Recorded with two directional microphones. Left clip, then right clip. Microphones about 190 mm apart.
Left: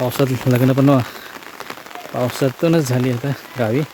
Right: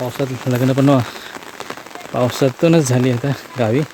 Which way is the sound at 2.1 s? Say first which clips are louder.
Right 3 dB; 10° right (ahead or behind).